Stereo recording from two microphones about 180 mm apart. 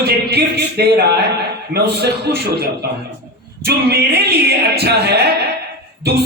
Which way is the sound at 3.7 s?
65° right (ahead or behind).